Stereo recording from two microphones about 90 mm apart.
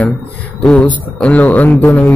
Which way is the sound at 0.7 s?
15° left (ahead or behind).